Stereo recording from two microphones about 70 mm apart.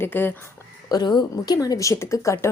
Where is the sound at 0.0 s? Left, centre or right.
Left.